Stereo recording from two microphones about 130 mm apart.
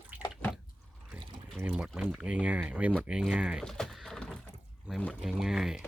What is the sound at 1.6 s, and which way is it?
Speech, 10° right (ahead or behind).